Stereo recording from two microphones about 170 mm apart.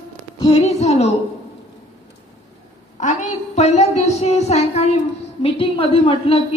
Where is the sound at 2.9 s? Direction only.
45° left (ahead or behind).